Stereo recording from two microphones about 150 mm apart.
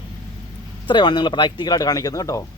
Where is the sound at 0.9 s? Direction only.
30° left (ahead or behind).